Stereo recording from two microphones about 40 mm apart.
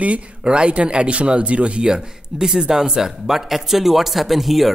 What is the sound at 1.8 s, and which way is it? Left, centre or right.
Speech, centre.